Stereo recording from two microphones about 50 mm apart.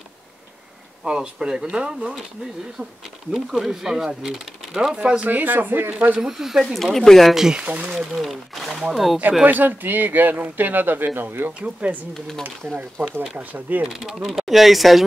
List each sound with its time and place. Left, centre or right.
1.0 s speech: centre
3.3 s speech: centre
4.9 s speech: right
5.3 s a man's voice: right
5.9 s speech: right
6.1 s speech: centre
6.7 s speech: centre
7.5 s speech: right
7.9 s speech: centre
9.4 s a man's voice: right
11.6 s speech: right
12.1 s speech: centre
12.4 s a man's voice: right
13.9 s speech: centre